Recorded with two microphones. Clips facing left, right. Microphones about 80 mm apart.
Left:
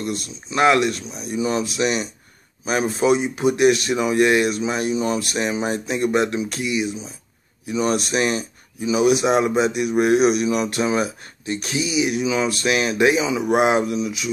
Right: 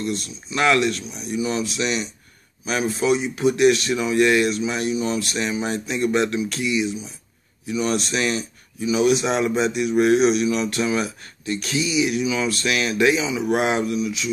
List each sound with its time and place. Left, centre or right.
0.5 s speech: left
1.3 s speech: left
1.8 s speech: centre